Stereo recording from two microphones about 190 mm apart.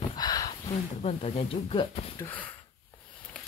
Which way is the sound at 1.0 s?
35° left (ahead or behind).